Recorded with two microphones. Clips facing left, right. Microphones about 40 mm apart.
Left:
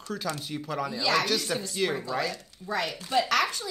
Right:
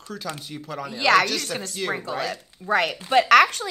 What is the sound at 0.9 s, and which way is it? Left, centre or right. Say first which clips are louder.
Speech: right 9 dB; right.